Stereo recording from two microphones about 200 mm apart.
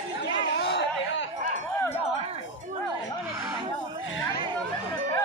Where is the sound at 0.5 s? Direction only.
60° left (ahead or behind).